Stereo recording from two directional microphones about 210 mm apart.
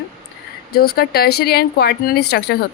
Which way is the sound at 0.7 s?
45° left (ahead or behind).